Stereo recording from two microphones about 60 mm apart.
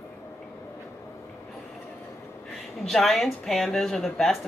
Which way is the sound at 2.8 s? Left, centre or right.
Centre.